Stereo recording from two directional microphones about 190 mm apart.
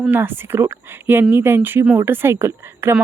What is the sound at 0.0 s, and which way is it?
Speech, 10° right (ahead or behind).